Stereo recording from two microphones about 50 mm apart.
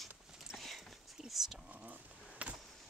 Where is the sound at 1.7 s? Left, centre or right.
Right.